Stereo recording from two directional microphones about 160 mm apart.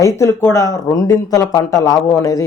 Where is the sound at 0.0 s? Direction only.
20° left (ahead or behind).